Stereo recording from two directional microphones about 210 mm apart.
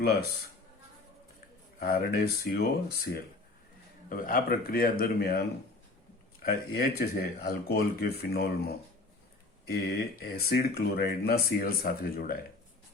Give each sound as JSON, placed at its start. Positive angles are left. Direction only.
{"t": 0.0, "sound": "speech", "side_deg": 50}
{"t": 1.8, "sound": "speech", "side_deg": 45}
{"t": 4.1, "sound": "speech", "side_deg": 45}
{"t": 6.7, "sound": "speech", "side_deg": 45}